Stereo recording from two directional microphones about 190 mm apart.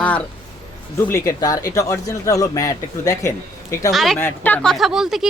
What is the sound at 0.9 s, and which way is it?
Speech, 15° left (ahead or behind).